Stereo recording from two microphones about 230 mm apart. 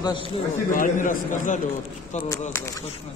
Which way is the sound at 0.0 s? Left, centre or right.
Left.